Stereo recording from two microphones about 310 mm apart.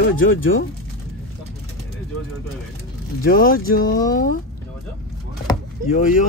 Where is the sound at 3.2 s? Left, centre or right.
Left.